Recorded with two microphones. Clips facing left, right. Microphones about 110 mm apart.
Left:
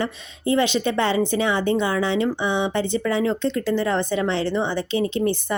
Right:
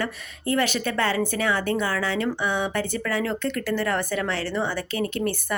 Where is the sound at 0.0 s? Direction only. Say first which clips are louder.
Left 3 dB; 20° left (ahead or behind).